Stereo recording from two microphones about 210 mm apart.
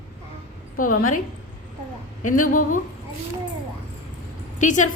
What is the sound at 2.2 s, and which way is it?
Speech, 40° left (ahead or behind).